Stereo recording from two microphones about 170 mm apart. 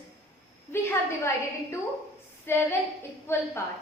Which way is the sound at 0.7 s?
15° left (ahead or behind).